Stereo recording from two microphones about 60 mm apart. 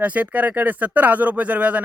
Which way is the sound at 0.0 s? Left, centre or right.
Right.